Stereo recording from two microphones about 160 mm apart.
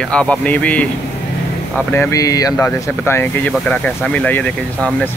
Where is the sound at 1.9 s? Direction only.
15° left (ahead or behind).